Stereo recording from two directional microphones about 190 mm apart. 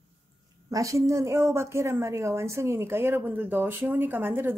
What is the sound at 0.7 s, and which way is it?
A woman's voice, 15° right (ahead or behind).